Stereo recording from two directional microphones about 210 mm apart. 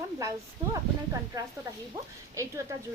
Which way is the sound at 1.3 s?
15° right (ahead or behind).